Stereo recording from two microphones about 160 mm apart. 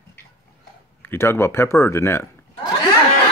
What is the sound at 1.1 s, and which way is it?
Speech, 15° left (ahead or behind).